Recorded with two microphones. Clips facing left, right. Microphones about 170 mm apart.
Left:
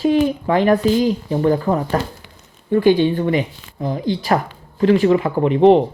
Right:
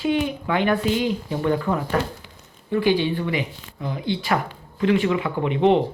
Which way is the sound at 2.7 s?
45° left (ahead or behind).